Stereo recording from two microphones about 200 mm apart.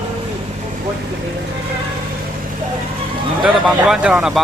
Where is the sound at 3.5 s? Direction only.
5° right (ahead or behind).